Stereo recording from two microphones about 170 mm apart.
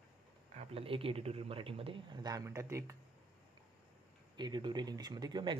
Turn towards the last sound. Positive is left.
turn(degrees=-25)  # may be behind; listen again after turning